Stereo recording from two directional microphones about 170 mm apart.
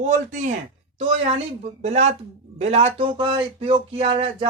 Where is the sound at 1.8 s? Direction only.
40° right (ahead or behind).